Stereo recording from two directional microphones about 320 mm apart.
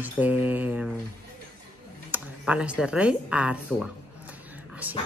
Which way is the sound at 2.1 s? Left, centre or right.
Centre.